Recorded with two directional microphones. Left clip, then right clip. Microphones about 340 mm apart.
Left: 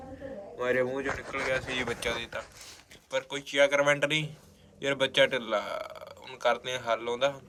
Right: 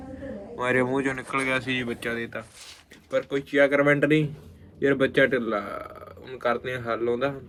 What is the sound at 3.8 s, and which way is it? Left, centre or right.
Speech, left.